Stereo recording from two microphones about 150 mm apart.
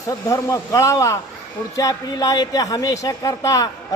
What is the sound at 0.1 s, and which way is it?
Speech, 20° left (ahead or behind).